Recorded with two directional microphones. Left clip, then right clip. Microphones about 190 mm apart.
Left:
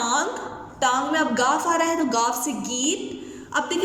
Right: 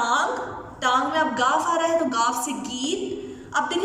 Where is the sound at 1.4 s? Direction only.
35° left (ahead or behind).